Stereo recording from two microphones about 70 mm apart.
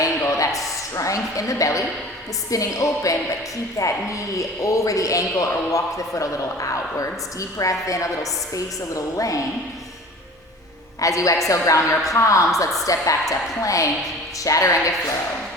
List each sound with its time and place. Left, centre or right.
0.0 s a sound: left
0.9 s a woman's voice: left
11.0 s a woman's voice: left